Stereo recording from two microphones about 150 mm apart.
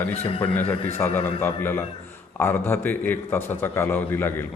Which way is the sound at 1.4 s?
15° left (ahead or behind).